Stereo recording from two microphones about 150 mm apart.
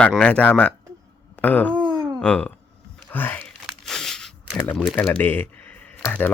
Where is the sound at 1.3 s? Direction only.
10° left (ahead or behind).